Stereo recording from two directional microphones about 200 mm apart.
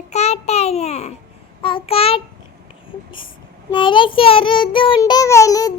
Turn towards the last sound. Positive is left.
turn(degrees=15)  # may be behind; listen again after turning